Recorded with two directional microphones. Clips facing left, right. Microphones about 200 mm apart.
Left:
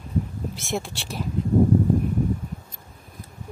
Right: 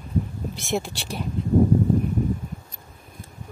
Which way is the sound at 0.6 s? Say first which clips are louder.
Right 4 dB; centre (ahead or behind).